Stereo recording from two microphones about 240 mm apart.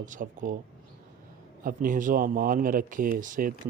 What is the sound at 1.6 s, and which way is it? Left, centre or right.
Speech, right.